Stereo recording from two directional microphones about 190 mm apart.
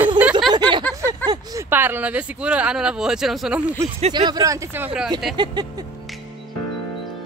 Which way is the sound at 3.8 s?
35° right (ahead or behind).